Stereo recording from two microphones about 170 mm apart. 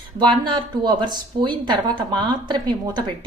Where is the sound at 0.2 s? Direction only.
25° right (ahead or behind).